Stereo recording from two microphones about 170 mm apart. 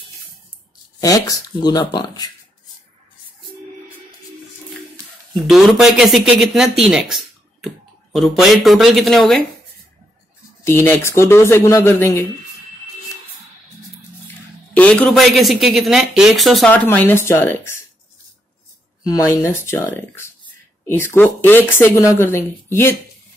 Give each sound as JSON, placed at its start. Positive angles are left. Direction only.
{"t": 1.0, "sound": "speech", "side_deg": 20}
{"t": 5.3, "sound": "speech", "side_deg": 0}
{"t": 10.6, "sound": "speech", "side_deg": 15}
{"t": 14.2, "sound": "speech", "side_deg": 10}
{"t": 19.0, "sound": "speech", "side_deg": 20}